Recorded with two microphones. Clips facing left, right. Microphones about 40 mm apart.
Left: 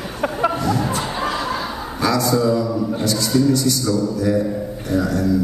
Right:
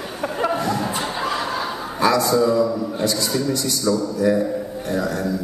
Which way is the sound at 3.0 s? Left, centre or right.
Centre.